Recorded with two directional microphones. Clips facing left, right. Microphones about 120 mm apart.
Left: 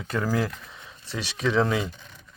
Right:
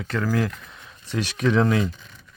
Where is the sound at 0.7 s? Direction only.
Centre (ahead or behind).